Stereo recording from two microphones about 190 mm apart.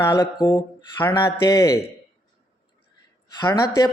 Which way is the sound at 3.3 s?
20° left (ahead or behind).